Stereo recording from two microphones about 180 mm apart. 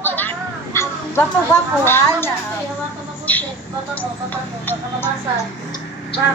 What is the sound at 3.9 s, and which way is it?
Speech, 10° left (ahead or behind).